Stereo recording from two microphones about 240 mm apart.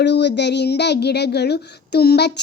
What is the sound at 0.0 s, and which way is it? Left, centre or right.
A child's voice, left.